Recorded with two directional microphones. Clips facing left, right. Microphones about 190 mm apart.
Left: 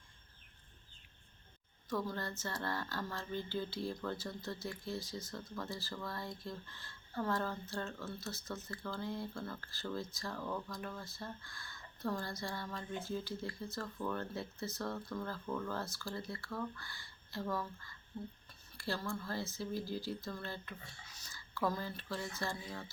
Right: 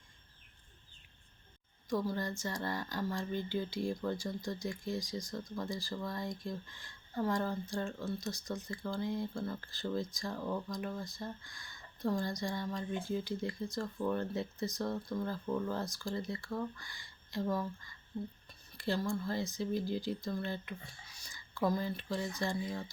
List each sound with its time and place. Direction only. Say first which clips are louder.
1.9 s speech: right 4 dB; 10° right (ahead or behind)